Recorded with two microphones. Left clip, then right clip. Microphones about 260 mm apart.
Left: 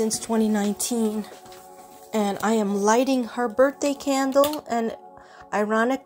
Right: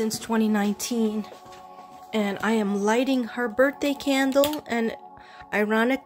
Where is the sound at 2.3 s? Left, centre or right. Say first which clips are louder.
Left 2 dB; centre.